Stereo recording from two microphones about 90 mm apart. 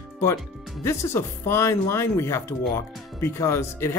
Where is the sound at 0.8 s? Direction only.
30° left (ahead or behind).